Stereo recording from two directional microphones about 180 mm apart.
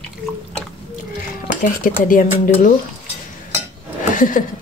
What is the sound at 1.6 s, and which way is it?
Speech, 50° left (ahead or behind).